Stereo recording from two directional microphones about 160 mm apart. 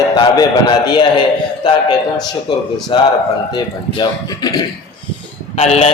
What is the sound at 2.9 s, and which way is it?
A man's voice, 30° left (ahead or behind).